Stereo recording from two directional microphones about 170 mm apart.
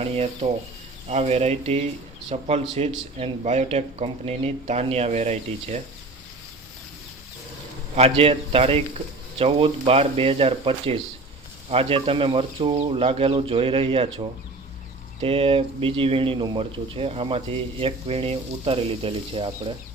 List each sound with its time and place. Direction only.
0.0 s speech: 35° right (ahead or behind)
7.9 s speech: 35° right (ahead or behind)